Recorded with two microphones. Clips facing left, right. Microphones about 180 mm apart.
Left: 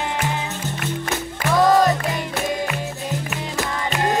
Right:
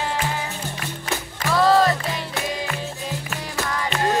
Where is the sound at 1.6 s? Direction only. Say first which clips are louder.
Left 1 dB; 15° left (ahead or behind).